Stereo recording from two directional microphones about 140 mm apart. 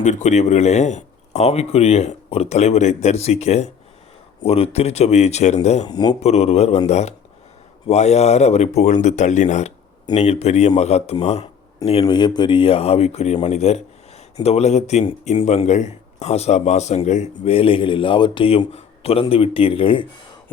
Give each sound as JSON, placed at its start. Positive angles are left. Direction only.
{"t": 0.0, "sound": "speech", "side_deg": 55}
{"t": 5.9, "sound": "speech", "side_deg": 30}
{"t": 6.2, "sound": "speech", "side_deg": 50}